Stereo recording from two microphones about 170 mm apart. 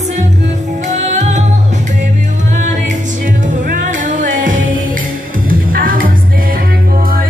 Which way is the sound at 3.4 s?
50° right (ahead or behind).